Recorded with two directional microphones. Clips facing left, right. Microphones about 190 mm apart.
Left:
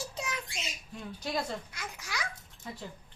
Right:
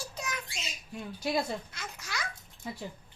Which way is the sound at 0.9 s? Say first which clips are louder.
Right 4 dB; 10° right (ahead or behind).